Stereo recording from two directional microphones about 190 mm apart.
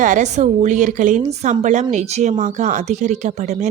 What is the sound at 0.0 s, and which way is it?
A woman's voice, 40° right (ahead or behind).